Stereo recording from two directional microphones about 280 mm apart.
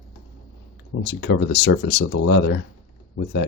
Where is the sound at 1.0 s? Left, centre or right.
Left.